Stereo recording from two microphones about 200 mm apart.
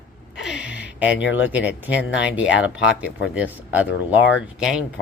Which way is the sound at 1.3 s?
10° right (ahead or behind).